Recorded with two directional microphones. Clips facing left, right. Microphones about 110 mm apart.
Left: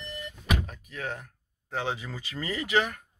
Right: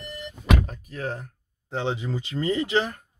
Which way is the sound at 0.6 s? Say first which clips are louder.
Right 5 dB; 40° right (ahead or behind).